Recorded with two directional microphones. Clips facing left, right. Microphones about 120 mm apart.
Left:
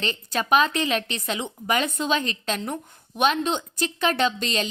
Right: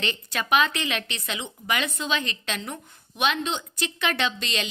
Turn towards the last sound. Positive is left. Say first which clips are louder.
# left 4 dB
turn(degrees=40)  # may be behind; listen again after turning